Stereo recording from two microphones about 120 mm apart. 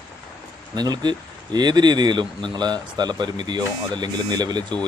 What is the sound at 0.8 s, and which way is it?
Speech, 35° right (ahead or behind).